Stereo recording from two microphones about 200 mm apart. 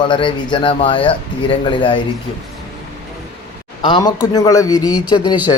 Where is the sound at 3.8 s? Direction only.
20° left (ahead or behind).